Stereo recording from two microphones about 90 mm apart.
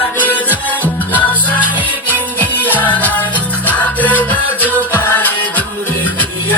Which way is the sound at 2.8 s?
20° left (ahead or behind).